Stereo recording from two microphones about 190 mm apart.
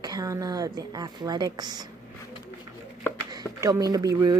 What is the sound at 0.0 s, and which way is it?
Speech, 20° right (ahead or behind).